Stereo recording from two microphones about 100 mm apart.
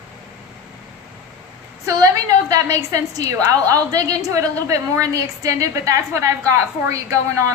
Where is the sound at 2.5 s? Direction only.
35° right (ahead or behind).